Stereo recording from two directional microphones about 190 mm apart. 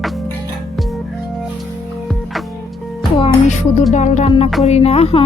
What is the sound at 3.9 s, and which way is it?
A woman's voice, 40° left (ahead or behind).